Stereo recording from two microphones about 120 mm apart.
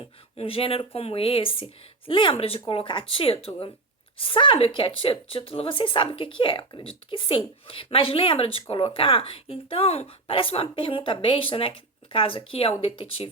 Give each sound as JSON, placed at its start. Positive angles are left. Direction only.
{"t": 0.3, "sound": "speech", "side_deg": 50}